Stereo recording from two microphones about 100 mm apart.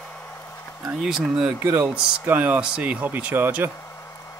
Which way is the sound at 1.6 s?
20° right (ahead or behind).